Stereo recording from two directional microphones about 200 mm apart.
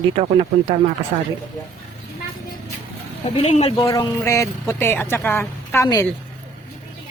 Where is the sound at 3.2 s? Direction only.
30° left (ahead or behind).